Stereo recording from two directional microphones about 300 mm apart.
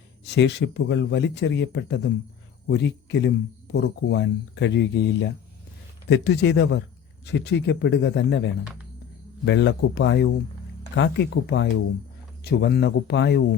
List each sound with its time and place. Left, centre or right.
0.3 s speech: left